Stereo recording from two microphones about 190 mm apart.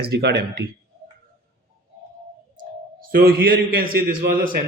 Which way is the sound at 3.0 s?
50° right (ahead or behind).